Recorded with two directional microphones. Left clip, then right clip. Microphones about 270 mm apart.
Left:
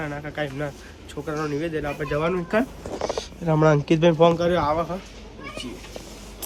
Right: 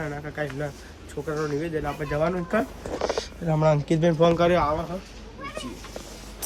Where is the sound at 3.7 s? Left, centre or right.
Centre.